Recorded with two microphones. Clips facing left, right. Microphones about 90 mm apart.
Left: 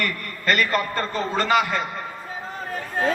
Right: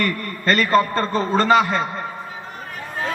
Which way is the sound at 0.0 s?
35° right (ahead or behind).